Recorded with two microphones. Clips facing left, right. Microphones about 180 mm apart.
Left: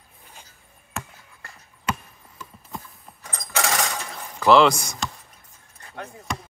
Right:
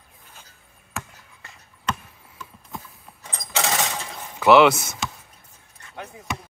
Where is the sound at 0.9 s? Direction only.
Centre (ahead or behind).